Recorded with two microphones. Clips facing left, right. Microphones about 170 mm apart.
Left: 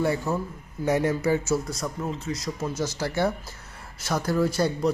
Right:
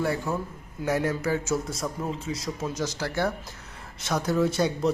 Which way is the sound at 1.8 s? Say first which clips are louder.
Even; 5° right (ahead or behind).